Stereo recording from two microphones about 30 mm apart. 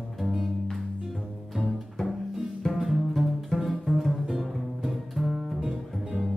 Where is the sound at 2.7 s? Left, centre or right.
Centre.